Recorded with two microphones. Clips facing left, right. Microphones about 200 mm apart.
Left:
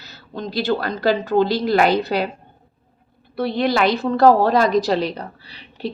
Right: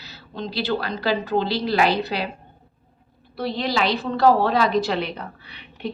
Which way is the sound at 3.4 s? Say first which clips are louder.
Left 5 dB; 55° left (ahead or behind).